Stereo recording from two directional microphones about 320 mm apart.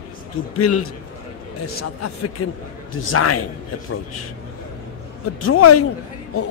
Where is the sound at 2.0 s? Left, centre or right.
Left.